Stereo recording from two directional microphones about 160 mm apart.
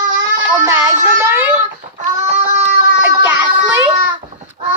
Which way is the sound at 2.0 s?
50° right (ahead or behind).